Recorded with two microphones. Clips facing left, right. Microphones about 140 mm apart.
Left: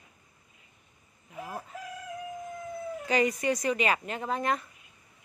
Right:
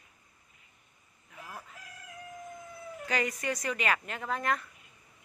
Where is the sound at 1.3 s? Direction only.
30° left (ahead or behind).